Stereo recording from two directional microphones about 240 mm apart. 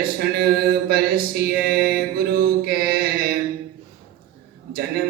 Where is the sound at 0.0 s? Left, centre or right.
Right.